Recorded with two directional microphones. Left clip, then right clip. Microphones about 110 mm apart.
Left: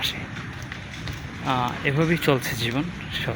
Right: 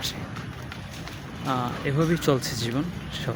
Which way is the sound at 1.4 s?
15° right (ahead or behind).